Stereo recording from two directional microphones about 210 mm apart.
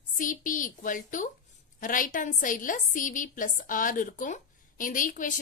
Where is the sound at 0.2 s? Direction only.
40° left (ahead or behind).